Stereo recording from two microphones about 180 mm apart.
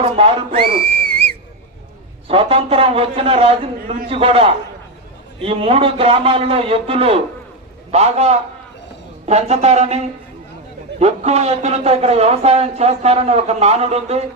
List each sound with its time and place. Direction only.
0.0 s whistle: 30° right (ahead or behind)
2.2 s speech: 30° right (ahead or behind)
11.0 s speech: 35° right (ahead or behind)